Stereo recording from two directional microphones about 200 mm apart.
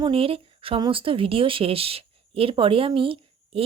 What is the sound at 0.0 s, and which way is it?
Speech, 25° right (ahead or behind).